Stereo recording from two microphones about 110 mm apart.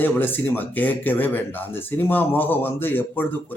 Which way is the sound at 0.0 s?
15° left (ahead or behind).